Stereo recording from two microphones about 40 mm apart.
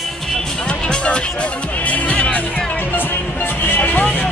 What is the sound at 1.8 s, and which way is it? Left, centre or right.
Music, left.